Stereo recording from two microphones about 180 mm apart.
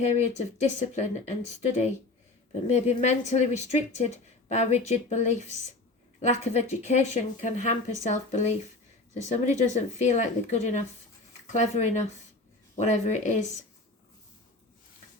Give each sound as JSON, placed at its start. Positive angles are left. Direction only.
{"t": 0.0, "sound": "a woman's voice", "side_deg": 40}